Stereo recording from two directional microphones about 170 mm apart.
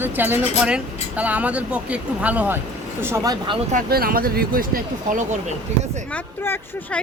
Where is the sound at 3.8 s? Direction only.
60° right (ahead or behind).